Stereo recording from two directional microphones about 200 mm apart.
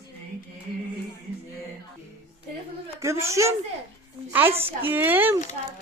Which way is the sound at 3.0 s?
15° right (ahead or behind).